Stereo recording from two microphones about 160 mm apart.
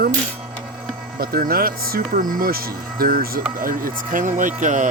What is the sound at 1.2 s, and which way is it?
Speech, 70° right (ahead or behind).